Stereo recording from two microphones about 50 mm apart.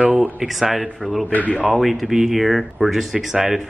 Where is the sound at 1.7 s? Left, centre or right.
Centre.